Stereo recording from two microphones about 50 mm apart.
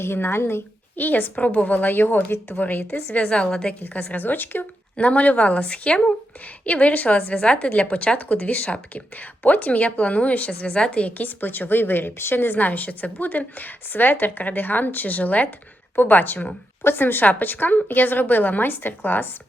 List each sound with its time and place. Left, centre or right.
0.0 s a woman's voice: left
0.9 s a woman's voice: left
2.9 s speech: left
3.8 s a woman's voice: left
4.9 s speech: left
11.3 s a woman's voice: left